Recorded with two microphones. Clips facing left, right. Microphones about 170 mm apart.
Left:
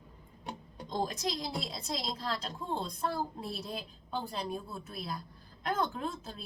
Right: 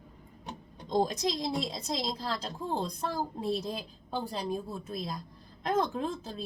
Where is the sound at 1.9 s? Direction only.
35° right (ahead or behind).